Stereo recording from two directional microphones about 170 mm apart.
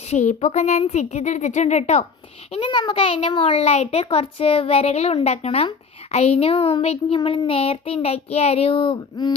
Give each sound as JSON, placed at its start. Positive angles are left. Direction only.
{"t": 0.0, "sound": "a woman's voice", "side_deg": 40}
{"t": 2.5, "sound": "a child's voice", "side_deg": 30}